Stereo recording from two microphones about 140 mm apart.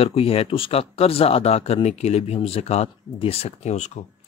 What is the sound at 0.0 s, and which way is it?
Speech, 45° left (ahead or behind).